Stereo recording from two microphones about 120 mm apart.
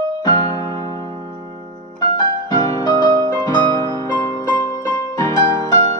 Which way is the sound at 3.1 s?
35° right (ahead or behind).